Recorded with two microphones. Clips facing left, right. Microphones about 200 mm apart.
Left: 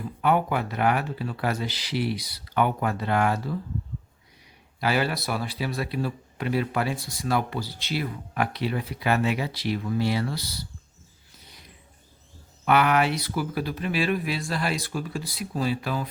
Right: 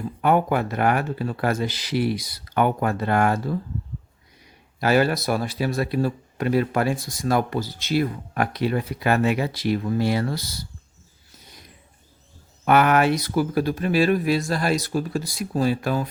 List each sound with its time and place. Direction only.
0.2 s a man's voice: 50° right (ahead or behind)
4.8 s a man's voice: 45° right (ahead or behind)
12.6 s a man's voice: 45° right (ahead or behind)